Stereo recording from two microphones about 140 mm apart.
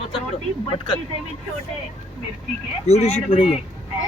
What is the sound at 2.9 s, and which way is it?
Speech, 50° left (ahead or behind).